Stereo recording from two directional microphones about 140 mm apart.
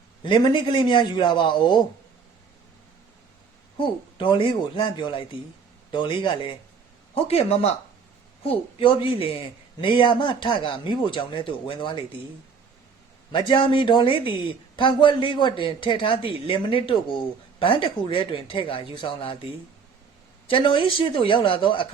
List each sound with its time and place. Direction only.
0.2 s speech: 35° left (ahead or behind)
3.8 s speech: 35° left (ahead or behind)
7.1 s speech: 45° left (ahead or behind)
13.3 s speech: 35° left (ahead or behind)
20.5 s speech: 35° left (ahead or behind)